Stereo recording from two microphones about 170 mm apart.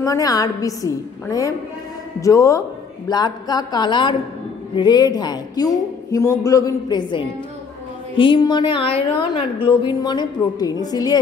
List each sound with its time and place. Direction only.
0.0 s a woman's voice: 20° left (ahead or behind)